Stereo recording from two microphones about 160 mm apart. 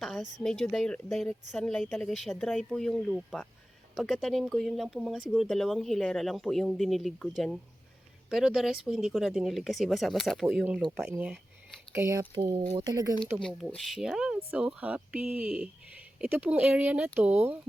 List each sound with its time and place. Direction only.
0.0 s speech: centre (ahead or behind); by 12.2 s 15° right (ahead or behind)
12.3 s speech: 35° right (ahead or behind)
12.7 s speech: 25° right (ahead or behind)
13.4 s speech: centre (ahead or behind)